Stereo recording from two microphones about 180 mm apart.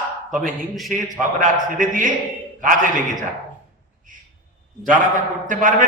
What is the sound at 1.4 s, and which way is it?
A man's voice, 45° right (ahead or behind).